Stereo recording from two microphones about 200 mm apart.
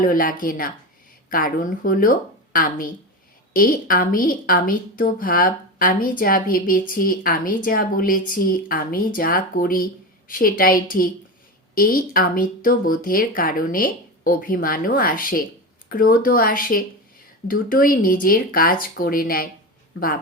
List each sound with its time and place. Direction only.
0.0 s a woman's voice: 45° left (ahead or behind)